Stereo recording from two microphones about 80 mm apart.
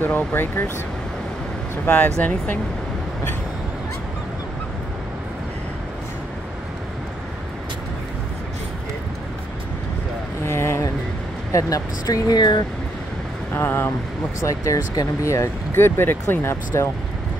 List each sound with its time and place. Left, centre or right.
0.0 s speech: left
2.1 s speech: centre
10.4 s a sound: left
11.5 s speech: left
12.4 s speech: left
13.6 s speech: left
14.4 s speech: left